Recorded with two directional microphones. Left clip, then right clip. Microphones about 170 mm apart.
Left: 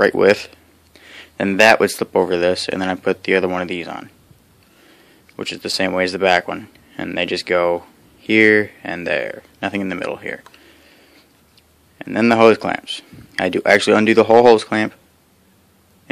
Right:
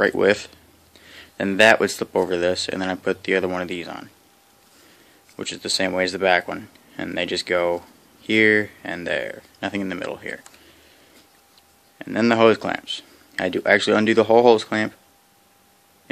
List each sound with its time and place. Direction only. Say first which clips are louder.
0.0 s speech: left 5 dB; 25° left (ahead or behind)
5.3 s speech: left 2 dB; 25° left (ahead or behind)
12.0 s speech: left 4 dB; 25° left (ahead or behind)